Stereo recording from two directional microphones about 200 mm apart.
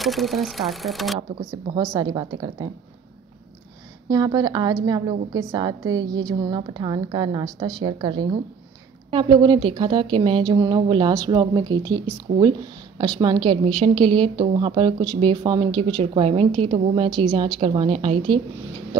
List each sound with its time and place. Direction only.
0.0 s speech: centre (ahead or behind)
1.7 s a woman's voice: 20° right (ahead or behind)
4.1 s speech: 20° right (ahead or behind)